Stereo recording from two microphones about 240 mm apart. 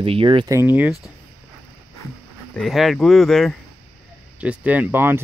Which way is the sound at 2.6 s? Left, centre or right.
Centre.